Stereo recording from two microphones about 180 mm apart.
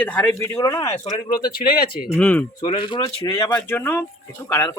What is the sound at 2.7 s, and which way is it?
Speech, 25° left (ahead or behind).